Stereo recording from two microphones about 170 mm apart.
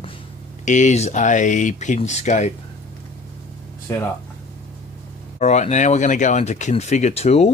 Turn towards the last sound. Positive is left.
turn(degrees=40)  # may be behind; listen again after turning